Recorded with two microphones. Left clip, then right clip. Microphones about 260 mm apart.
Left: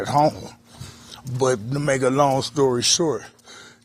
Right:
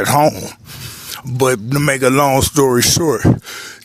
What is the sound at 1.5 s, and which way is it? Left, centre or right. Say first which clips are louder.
Speech: right 6 dB; right.